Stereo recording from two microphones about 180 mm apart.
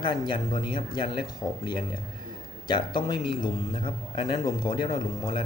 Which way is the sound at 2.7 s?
25° left (ahead or behind).